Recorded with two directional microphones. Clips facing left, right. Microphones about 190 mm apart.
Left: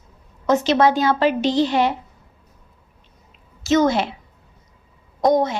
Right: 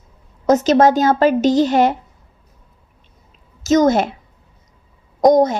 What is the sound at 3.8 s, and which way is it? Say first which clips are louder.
Speech: right 5 dB; 45° right (ahead or behind).